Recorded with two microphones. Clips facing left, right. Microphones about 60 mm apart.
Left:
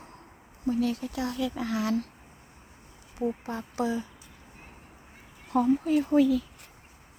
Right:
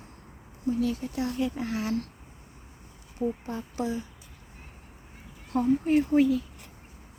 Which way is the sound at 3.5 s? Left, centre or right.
Left.